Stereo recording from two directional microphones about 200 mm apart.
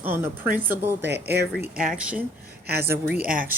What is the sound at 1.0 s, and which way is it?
Speech, 55° right (ahead or behind).